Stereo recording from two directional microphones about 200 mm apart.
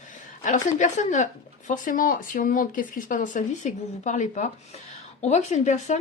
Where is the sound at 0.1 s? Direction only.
40° left (ahead or behind).